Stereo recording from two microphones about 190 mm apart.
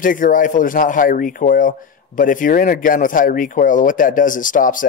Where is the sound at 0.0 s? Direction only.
45° left (ahead or behind).